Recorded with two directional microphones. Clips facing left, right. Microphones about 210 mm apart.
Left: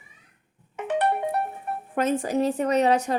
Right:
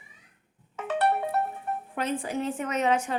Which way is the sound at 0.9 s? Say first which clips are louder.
Left 2 dB; 15° left (ahead or behind).